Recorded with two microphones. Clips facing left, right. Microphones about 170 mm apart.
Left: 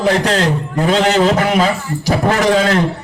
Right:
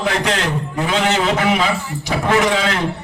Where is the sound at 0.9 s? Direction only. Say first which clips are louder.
Left 5 dB; 40° left (ahead or behind).